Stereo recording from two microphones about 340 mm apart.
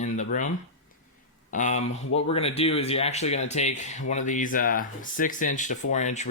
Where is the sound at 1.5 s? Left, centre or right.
Left.